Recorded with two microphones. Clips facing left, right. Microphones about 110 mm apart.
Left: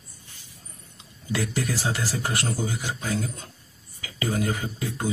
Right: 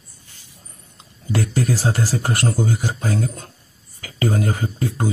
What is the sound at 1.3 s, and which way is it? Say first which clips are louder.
Speech: right 6 dB; 45° right (ahead or behind).